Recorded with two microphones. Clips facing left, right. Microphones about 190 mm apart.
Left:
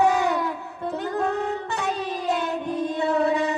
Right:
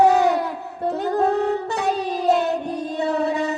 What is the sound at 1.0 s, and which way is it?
Music, 35° right (ahead or behind).